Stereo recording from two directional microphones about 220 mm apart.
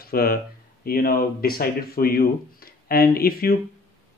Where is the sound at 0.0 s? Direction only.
45° left (ahead or behind).